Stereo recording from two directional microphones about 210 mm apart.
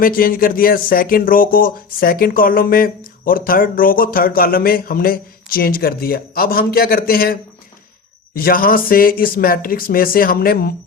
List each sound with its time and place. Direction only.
0.0 s speech: 45° left (ahead or behind)